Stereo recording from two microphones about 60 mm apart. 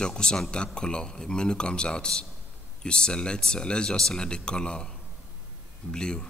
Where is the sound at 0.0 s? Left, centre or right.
Centre.